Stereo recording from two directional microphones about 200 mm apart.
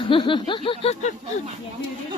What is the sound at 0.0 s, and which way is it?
Speech, 25° left (ahead or behind).